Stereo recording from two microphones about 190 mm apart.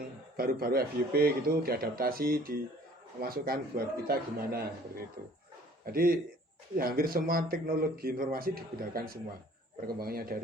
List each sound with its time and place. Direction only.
0.3 s speech: 50° right (ahead or behind)